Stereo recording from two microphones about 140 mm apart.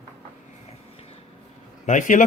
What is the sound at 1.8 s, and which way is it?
Speech, 65° left (ahead or behind).